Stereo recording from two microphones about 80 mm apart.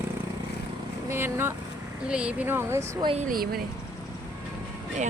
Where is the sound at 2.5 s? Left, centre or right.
Right.